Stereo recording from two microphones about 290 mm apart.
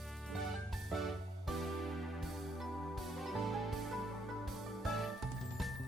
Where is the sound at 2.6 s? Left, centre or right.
Centre.